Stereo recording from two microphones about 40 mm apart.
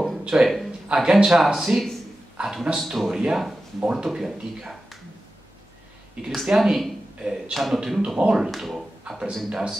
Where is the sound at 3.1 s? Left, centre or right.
Centre.